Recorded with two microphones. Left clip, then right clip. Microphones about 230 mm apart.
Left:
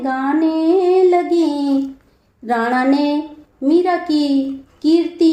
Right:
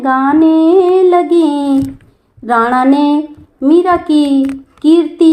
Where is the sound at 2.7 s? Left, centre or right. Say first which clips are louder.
Right 6 dB; right.